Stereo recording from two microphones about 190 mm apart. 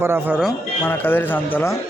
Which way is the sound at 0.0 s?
10° right (ahead or behind).